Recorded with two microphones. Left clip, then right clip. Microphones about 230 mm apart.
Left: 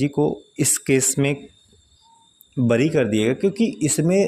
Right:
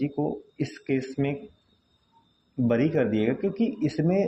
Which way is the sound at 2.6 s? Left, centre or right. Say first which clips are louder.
Left 5 dB; left.